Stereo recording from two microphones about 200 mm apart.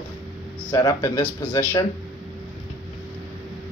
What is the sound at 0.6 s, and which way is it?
Speech, 20° left (ahead or behind).